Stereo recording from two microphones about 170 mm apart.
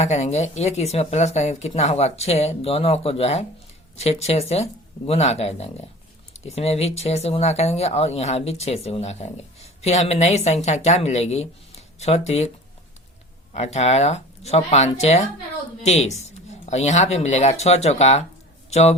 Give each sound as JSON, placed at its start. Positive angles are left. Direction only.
{"t": 0.0, "sound": "speech", "side_deg": 40}
{"t": 13.5, "sound": "speech", "side_deg": 40}